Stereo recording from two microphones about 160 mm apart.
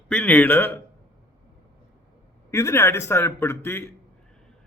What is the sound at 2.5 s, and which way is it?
Speech, 15° left (ahead or behind).